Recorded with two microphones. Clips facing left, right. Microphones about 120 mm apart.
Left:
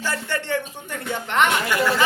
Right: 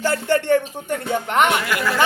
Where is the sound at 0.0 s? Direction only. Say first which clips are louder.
Right 8 dB; 50° right (ahead or behind).